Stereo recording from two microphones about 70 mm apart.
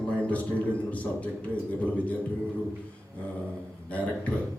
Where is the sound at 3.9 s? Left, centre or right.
Centre.